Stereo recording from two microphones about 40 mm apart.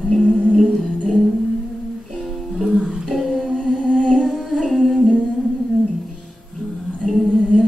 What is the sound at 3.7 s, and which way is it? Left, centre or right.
Humming, centre.